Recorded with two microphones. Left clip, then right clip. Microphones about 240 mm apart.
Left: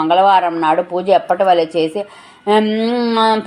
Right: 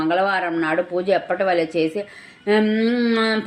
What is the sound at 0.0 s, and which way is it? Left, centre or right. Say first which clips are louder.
Speech: left 8 dB; left.